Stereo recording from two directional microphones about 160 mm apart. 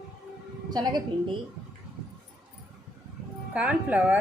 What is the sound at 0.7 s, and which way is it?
Speech, 25° right (ahead or behind).